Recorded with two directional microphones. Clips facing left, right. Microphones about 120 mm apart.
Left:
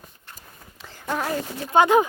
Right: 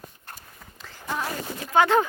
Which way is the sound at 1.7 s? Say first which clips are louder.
Left 3 dB; 15° left (ahead or behind).